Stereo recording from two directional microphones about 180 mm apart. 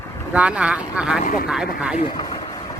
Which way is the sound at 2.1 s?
25° left (ahead or behind).